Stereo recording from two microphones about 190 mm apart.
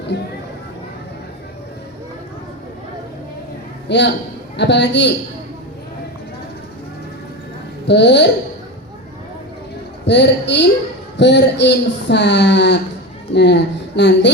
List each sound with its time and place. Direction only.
3.8 s a man's voice: 65° left (ahead or behind)
7.9 s speech: 65° left (ahead or behind)
10.1 s speech: 65° left (ahead or behind)